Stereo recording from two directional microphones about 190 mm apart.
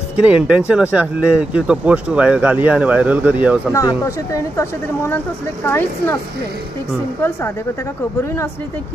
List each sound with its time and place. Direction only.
0.2 s speech: 5° right (ahead or behind)
3.7 s speech: 15° left (ahead or behind)
7.2 s speech: 15° left (ahead or behind)